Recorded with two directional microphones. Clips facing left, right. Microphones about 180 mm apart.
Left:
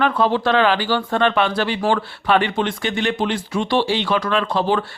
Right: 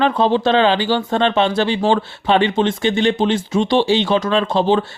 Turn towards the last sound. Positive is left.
turn(degrees=-25)  # may be behind; listen again after turning